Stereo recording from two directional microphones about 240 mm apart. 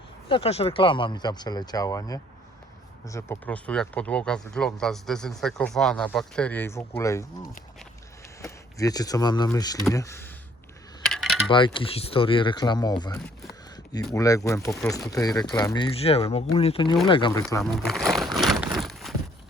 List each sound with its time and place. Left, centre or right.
0.3 s speech: left
8.4 s speech: centre
11.1 s coin: centre
11.4 s speech: left
17.6 s speech: centre
18.8 s a sound: centre